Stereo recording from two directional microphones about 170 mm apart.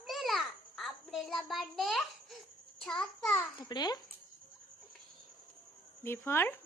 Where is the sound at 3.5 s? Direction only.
25° left (ahead or behind).